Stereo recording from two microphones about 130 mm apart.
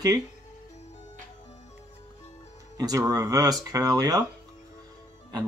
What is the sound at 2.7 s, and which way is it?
Speech, 25° right (ahead or behind).